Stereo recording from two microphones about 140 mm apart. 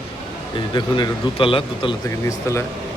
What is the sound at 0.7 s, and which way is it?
Speech, 30° left (ahead or behind).